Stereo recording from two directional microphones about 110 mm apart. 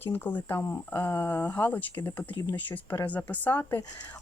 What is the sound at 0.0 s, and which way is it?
Speech, 15° left (ahead or behind).